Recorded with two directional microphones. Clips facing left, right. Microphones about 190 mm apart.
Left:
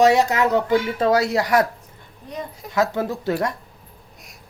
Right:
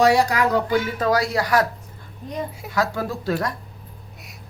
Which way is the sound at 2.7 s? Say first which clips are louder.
Left 3 dB; 20° left (ahead or behind).